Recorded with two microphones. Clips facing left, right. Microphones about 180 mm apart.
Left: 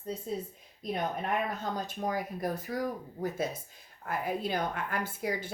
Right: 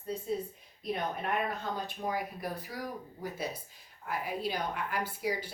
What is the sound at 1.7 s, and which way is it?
A woman's voice, 45° left (ahead or behind).